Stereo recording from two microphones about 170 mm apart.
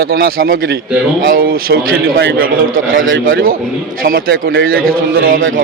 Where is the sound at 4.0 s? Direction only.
60° right (ahead or behind).